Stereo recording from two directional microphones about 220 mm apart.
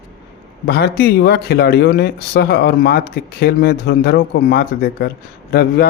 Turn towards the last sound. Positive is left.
turn(degrees=45)  # may be behind; listen again after turning